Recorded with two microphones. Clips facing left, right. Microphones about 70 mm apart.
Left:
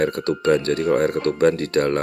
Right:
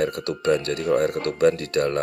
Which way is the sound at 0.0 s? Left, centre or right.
Left.